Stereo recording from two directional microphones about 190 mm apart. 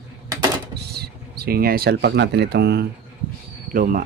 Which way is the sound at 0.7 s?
60° right (ahead or behind).